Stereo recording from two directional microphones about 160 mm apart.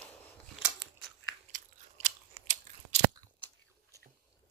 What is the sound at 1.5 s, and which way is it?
Crunch, 55° right (ahead or behind).